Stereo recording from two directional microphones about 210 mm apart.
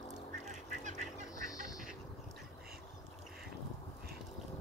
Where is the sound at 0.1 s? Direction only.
35° right (ahead or behind).